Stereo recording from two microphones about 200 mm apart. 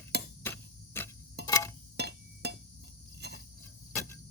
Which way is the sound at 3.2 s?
55° right (ahead or behind).